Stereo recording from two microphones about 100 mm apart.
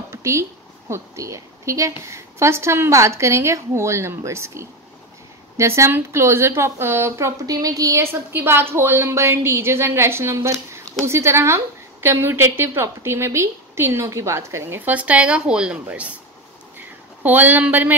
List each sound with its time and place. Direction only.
0.1 s a woman's voice: 30° right (ahead or behind)
14.9 s speech: 15° right (ahead or behind)
16.7 s a sound: 20° right (ahead or behind)